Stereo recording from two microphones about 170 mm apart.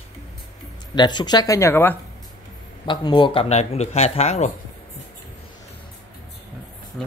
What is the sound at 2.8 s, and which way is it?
Speech, 25° left (ahead or behind).